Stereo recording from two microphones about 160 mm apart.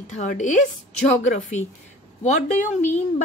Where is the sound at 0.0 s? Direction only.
45° left (ahead or behind).